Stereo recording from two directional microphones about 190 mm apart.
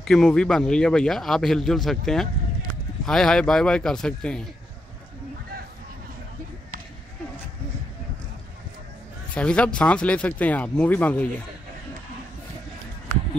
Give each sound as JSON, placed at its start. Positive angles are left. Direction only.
{"t": 0.0, "sound": "a man's voice", "side_deg": 5}
{"t": 9.3, "sound": "speech", "side_deg": 5}